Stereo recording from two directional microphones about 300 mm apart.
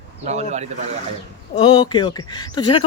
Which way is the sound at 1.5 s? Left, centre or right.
Centre.